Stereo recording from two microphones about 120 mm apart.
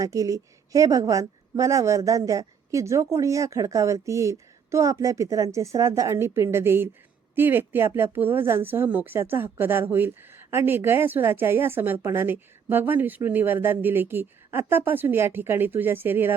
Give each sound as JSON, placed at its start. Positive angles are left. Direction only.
{"t": 0.0, "sound": "a woman's voice", "side_deg": -30}